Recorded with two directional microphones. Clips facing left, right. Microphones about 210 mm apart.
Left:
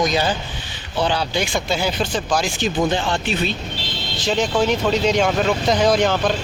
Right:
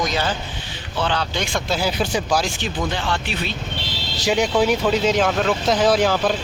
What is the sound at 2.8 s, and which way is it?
Speech, 25° left (ahead or behind).